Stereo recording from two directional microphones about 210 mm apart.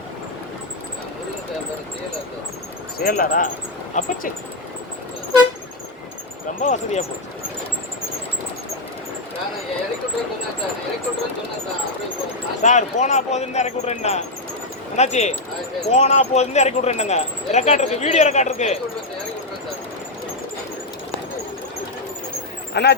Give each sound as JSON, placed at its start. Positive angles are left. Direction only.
{"t": 3.0, "sound": "speech", "side_deg": 40}
{"t": 6.6, "sound": "speech", "side_deg": 35}
{"t": 12.6, "sound": "speech", "side_deg": 35}
{"t": 22.7, "sound": "speech", "side_deg": 50}